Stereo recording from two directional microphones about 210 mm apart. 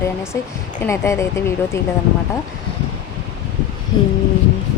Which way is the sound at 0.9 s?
15° left (ahead or behind).